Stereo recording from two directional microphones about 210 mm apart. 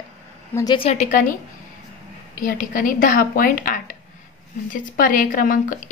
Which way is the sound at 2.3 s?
40° left (ahead or behind).